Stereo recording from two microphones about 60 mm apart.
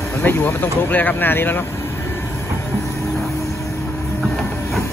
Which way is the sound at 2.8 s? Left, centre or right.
Left.